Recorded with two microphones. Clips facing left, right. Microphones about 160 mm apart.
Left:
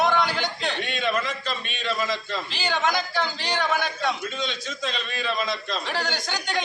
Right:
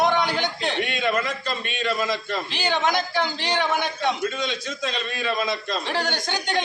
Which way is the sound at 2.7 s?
20° right (ahead or behind).